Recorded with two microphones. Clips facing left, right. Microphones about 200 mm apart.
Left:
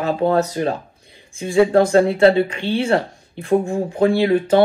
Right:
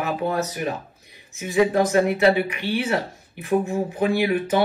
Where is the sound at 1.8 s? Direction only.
25° left (ahead or behind).